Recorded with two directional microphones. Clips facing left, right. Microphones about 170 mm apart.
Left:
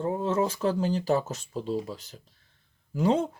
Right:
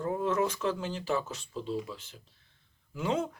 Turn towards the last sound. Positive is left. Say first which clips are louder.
# left 6 dB
turn(degrees=35)  # may be behind; listen again after turning